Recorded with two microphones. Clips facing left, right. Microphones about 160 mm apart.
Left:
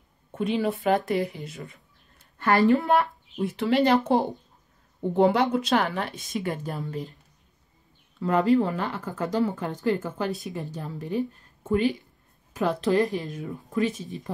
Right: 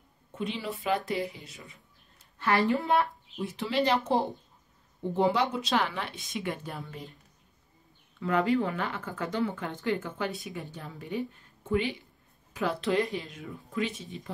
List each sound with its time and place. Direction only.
0.3 s a woman's voice: 50° left (ahead or behind)
3.3 s speech: 65° left (ahead or behind); by 7.2 s 40° left (ahead or behind)
8.2 s speech: 40° left (ahead or behind)